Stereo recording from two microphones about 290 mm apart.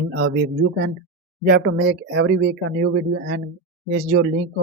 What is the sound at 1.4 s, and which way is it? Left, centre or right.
Speech, right.